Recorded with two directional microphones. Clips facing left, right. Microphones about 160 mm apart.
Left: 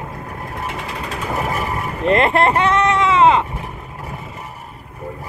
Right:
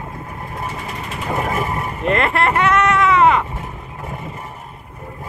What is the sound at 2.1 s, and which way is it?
Bleat, 35° left (ahead or behind).